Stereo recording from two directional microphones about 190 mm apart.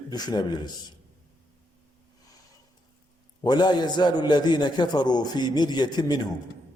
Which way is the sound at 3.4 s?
20° left (ahead or behind).